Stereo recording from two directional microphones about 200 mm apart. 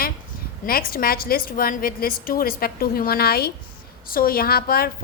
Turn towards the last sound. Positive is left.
turn(degrees=50)  # may be behind; listen again after turning